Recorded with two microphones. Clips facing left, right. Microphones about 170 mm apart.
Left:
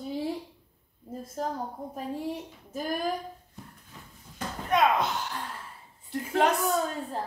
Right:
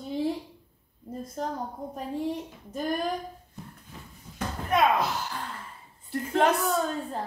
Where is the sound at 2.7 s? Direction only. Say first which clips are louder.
Right 2 dB; 5° left (ahead or behind).